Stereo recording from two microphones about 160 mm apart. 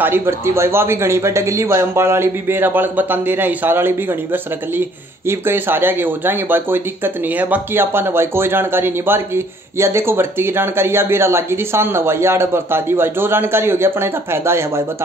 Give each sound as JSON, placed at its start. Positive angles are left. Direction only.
{"t": 0.0, "sound": "speech", "side_deg": -15}